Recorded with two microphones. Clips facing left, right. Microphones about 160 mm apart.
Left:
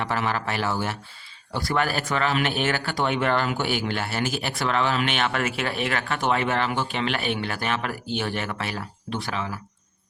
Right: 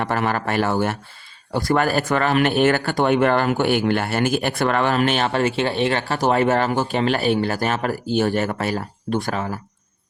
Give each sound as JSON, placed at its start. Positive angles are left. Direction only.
{"t": 0.0, "sound": "speech", "side_deg": -50}